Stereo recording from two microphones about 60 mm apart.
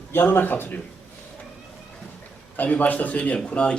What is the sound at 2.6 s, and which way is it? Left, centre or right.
A man's voice, left.